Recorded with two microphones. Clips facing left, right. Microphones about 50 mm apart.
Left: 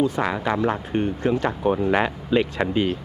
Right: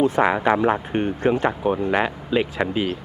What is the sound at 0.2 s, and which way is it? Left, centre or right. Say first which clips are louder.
Speech: right 5 dB; right.